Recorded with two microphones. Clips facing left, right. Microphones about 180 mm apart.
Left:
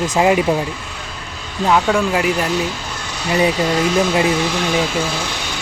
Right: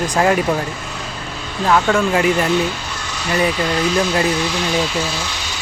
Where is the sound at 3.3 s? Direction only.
20° left (ahead or behind).